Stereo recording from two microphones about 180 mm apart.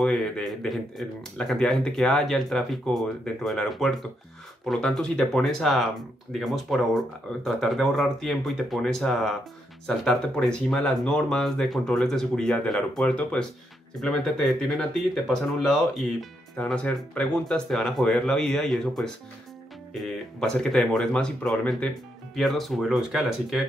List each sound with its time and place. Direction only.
0.0 s speech: 5° left (ahead or behind)